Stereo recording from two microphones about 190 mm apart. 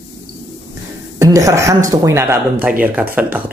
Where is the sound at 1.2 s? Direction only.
15° right (ahead or behind).